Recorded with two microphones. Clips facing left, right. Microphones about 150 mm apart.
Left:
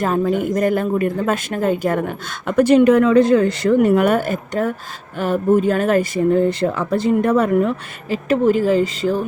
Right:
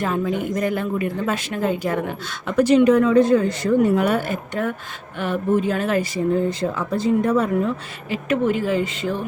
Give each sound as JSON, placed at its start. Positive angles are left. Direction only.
{"t": 0.0, "sound": "speech", "side_deg": 45}
{"t": 8.1, "sound": "speech", "side_deg": 35}